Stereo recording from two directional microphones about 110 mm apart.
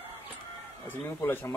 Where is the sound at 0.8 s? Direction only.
20° left (ahead or behind).